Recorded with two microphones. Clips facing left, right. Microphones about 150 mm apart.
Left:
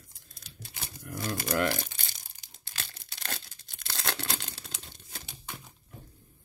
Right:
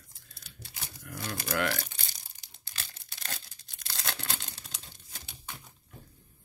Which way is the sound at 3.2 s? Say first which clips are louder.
Left 3 dB; 65° left (ahead or behind).